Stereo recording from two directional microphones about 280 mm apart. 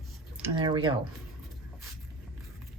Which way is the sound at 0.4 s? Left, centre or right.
Centre.